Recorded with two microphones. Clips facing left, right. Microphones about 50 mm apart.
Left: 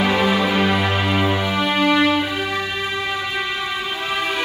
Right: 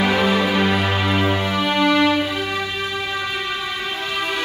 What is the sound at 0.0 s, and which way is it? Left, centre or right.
Music, centre.